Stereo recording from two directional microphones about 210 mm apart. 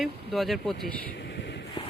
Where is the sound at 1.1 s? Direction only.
55° left (ahead or behind).